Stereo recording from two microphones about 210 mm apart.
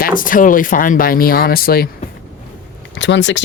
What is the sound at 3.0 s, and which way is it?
Speech, 60° left (ahead or behind).